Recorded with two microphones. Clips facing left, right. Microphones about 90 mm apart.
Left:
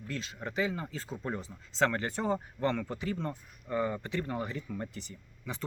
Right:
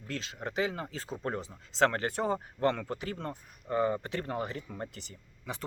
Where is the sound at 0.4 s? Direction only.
65° right (ahead or behind).